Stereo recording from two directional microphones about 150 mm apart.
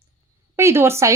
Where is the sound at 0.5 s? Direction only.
15° right (ahead or behind).